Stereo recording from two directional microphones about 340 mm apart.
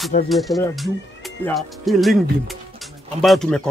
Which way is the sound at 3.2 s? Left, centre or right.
Centre.